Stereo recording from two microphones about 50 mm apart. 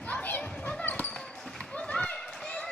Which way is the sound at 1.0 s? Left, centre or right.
Centre.